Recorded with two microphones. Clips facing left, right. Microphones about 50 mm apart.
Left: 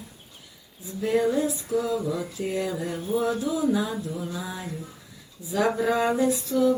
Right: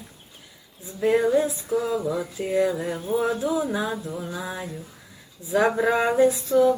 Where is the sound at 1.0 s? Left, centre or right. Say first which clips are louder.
Right 3 dB; right.